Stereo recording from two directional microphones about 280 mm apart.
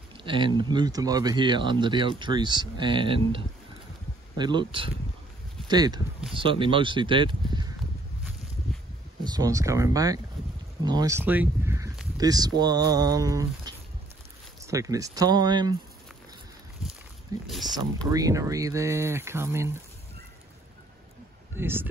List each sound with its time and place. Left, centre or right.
0.2 s speech: centre
9.2 s speech: centre
17.5 s speech: centre
18.1 s speech: centre
21.5 s speech: centre